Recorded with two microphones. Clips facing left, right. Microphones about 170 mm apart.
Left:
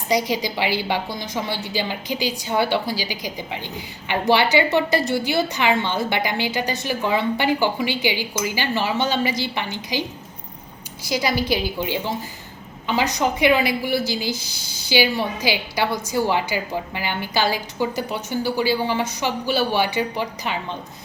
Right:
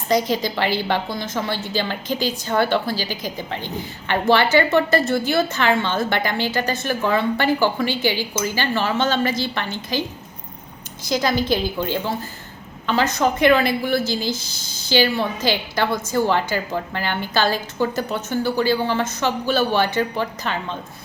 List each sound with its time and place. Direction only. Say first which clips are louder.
0.1 s a woman's voice: right 2 dB; 15° left (ahead or behind)